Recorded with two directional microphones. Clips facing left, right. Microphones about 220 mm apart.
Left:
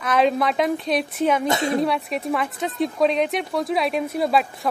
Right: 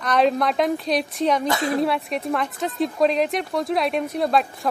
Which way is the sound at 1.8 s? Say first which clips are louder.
Even; centre (ahead or behind).